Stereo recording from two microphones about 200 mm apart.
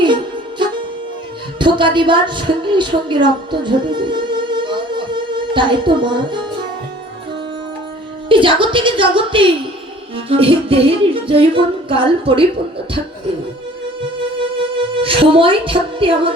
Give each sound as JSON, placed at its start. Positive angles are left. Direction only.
{"t": 1.5, "sound": "a woman's voice", "side_deg": -25}
{"t": 5.5, "sound": "music", "side_deg": -25}
{"t": 8.3, "sound": "music", "side_deg": -25}
{"t": 14.3, "sound": "music", "side_deg": -25}